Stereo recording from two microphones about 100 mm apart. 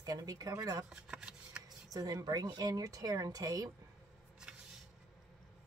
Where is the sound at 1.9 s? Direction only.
40° right (ahead or behind).